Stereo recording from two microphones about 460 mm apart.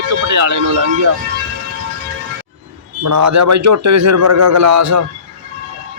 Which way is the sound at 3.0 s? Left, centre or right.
Right.